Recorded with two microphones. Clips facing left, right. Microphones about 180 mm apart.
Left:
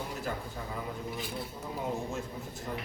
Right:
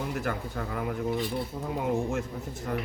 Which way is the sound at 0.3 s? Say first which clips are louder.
Right 5 dB; 65° right (ahead or behind).